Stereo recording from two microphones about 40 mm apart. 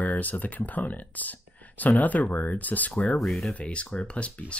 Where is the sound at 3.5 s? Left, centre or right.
Left.